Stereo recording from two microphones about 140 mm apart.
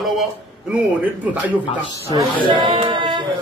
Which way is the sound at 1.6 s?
35° left (ahead or behind).